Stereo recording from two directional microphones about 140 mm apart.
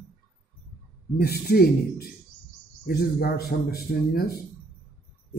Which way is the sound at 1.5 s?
90° left.